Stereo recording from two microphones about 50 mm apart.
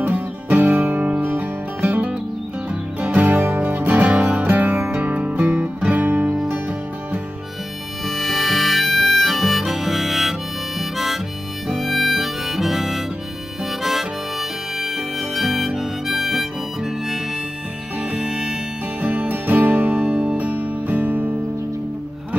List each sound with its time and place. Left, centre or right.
0.0 s music: right
8.1 s harmonica: centre
15.1 s harmonica: centre
18.1 s music: centre
18.9 s music: right
20.0 s music: centre
20.3 s music: right